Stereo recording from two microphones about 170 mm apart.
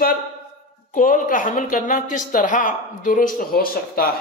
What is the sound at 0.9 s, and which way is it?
Speech, 50° left (ahead or behind).